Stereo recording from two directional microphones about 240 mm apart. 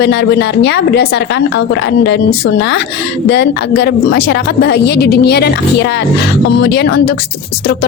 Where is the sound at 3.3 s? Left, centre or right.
Left.